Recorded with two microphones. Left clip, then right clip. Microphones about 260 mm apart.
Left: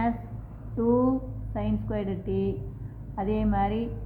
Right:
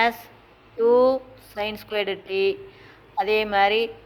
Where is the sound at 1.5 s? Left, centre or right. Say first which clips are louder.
Right 6 dB; right.